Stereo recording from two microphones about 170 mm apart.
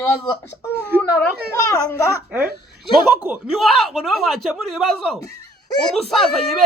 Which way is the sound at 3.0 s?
10° right (ahead or behind).